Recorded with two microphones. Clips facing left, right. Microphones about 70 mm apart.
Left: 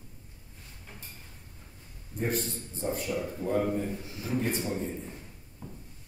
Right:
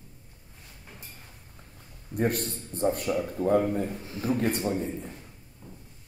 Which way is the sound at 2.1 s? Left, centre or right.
Right.